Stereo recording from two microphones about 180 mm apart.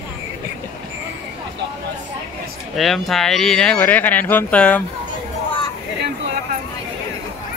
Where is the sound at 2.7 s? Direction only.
Centre (ahead or behind).